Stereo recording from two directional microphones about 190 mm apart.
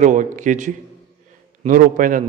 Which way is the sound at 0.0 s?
40° right (ahead or behind).